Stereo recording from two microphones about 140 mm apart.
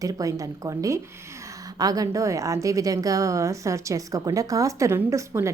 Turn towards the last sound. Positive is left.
turn(degrees=-15)  # may be behind; listen again after turning